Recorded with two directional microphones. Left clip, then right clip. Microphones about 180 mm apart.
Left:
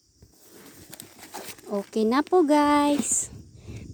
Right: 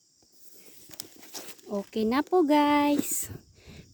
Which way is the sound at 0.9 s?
55° left (ahead or behind).